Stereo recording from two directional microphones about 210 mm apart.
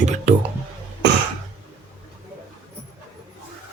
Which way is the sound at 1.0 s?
50° right (ahead or behind).